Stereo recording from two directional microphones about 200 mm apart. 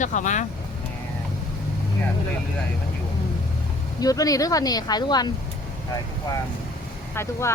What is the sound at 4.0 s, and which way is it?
Speech, 20° left (ahead or behind).